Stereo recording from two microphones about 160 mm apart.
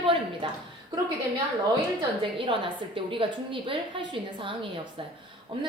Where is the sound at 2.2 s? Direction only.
30° right (ahead or behind).